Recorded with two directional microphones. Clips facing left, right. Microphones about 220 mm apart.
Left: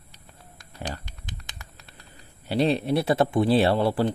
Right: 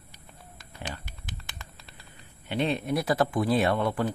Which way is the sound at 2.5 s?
35° left (ahead or behind).